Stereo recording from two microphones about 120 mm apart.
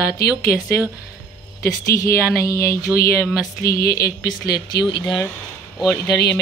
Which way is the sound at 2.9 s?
15° right (ahead or behind).